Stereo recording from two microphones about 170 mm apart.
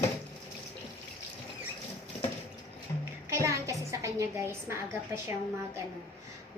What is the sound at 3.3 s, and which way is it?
Music, 20° right (ahead or behind).